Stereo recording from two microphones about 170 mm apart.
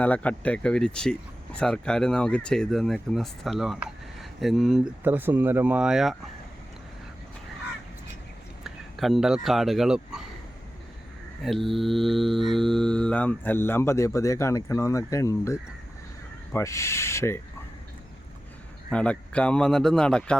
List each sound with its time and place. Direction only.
0.0 s livestock: 10° left (ahead or behind)
1.5 s speech: 5° left (ahead or behind)
5.0 s speech: 10° right (ahead or behind)
8.6 s speech: centre (ahead or behind)
11.4 s livestock: centre (ahead or behind); by 15.5 s 20° left (ahead or behind)
16.5 s speech: 15° left (ahead or behind)
18.9 s speech: 5° left (ahead or behind)